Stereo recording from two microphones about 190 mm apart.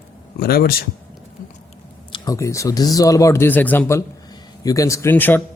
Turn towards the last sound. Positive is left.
turn(degrees=10)  # may be behind; listen again after turning